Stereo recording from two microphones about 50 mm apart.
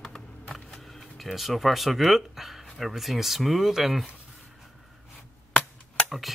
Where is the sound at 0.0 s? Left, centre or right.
Centre.